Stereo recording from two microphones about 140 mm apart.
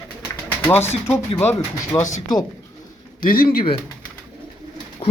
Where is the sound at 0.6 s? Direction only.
15° left (ahead or behind).